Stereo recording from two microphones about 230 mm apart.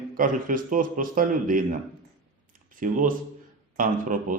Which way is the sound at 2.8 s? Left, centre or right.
Right.